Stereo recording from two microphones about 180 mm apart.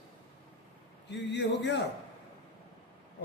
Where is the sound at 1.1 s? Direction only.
75° left (ahead or behind).